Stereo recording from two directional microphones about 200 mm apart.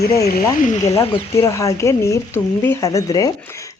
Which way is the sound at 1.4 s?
15° left (ahead or behind).